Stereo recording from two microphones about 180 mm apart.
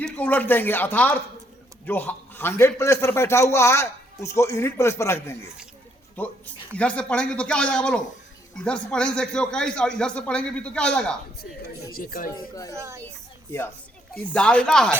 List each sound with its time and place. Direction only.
0.0 s a man's voice: 10° left (ahead or behind)
11.8 s speech: 55° left (ahead or behind)
12.7 s speech: 15° right (ahead or behind)
14.3 s speech: 5° left (ahead or behind)